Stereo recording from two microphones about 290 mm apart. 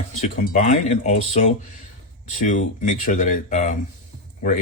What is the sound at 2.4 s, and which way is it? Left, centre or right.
Speech, left.